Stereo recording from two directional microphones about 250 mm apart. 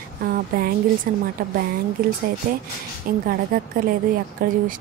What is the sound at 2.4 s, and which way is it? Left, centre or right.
A woman's voice, right.